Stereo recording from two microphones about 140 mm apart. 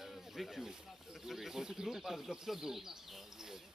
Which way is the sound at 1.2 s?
Centre (ahead or behind).